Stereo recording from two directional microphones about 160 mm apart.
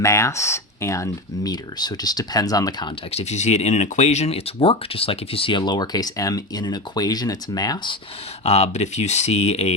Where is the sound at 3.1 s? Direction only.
45° left (ahead or behind); by 8.0 s 25° left (ahead or behind).